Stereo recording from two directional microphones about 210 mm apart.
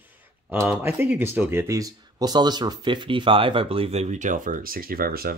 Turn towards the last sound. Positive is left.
turn(degrees=-45)  # may be behind; listen again after turning